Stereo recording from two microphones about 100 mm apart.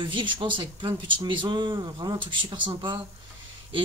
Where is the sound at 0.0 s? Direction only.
55° right (ahead or behind).